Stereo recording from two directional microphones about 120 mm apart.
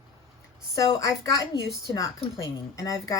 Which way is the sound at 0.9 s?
30° left (ahead or behind).